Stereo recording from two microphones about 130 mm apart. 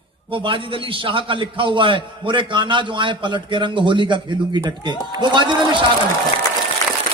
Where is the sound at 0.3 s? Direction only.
40° right (ahead or behind).